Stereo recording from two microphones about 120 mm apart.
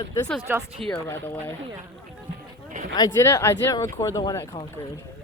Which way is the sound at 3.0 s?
25° left (ahead or behind).